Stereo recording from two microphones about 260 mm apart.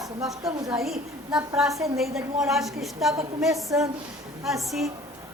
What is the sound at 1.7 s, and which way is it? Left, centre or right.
Speech, centre.